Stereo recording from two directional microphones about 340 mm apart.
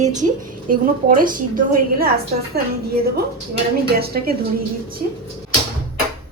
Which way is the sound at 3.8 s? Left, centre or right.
Right.